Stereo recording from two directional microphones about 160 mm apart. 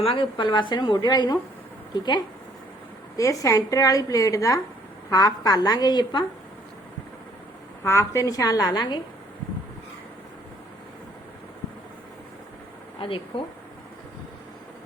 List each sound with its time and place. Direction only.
0.0 s a woman's voice: 30° left (ahead or behind)
7.9 s a woman's voice: 20° left (ahead or behind)
13.0 s speech: 35° left (ahead or behind)